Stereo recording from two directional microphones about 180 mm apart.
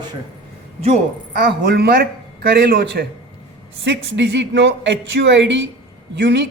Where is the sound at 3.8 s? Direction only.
90° right.